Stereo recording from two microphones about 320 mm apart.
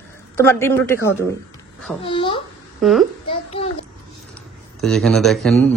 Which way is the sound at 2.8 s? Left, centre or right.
Centre.